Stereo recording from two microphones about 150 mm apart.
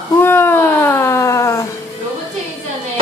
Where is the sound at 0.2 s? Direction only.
15° left (ahead or behind).